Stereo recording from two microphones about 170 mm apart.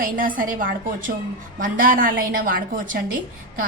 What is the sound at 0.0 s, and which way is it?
A woman's voice, 55° right (ahead or behind).